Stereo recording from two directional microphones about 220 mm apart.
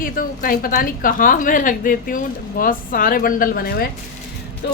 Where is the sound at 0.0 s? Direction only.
40° left (ahead or behind).